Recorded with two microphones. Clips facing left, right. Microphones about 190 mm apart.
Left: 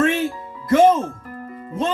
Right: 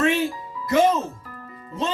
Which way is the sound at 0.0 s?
50° left (ahead or behind).